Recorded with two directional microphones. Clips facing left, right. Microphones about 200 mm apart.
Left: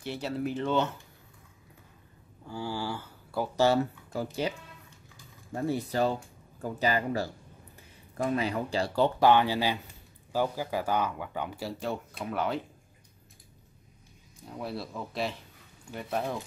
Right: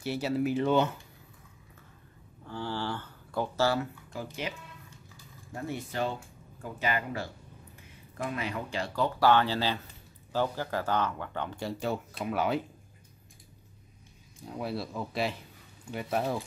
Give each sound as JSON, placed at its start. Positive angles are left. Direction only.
{"t": 0.0, "sound": "speech", "side_deg": -5}
{"t": 2.4, "sound": "speech", "side_deg": 10}
{"t": 4.1, "sound": "speech", "side_deg": 35}
{"t": 9.2, "sound": "speech", "side_deg": 15}
{"t": 14.6, "sound": "speech", "side_deg": 0}